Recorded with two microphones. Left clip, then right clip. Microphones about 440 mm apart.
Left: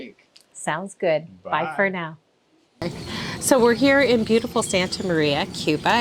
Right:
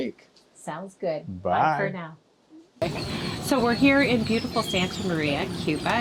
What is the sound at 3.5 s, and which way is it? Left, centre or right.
A woman's voice, left.